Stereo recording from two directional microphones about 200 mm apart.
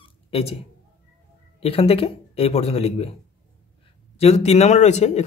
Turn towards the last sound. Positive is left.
turn(degrees=35)  # may be behind; listen again after turning